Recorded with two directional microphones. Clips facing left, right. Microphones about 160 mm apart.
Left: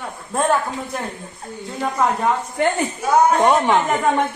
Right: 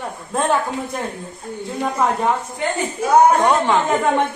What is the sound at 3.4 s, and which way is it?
Speech, 20° left (ahead or behind).